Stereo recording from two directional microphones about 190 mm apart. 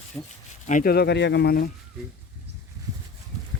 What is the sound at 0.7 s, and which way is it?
Speech, 50° left (ahead or behind).